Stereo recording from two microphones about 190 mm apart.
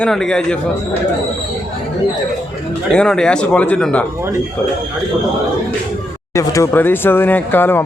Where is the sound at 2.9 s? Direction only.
5° left (ahead or behind).